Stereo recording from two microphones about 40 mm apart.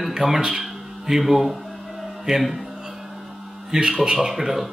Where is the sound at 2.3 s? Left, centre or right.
Centre.